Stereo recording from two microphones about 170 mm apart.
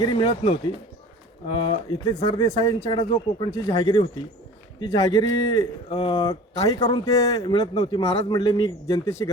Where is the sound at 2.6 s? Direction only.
25° left (ahead or behind).